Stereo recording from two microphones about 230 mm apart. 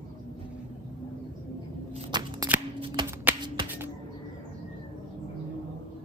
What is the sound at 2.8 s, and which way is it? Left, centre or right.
Shuffling cards, centre.